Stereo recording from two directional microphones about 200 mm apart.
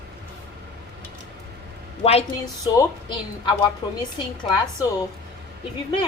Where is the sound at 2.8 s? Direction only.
20° left (ahead or behind).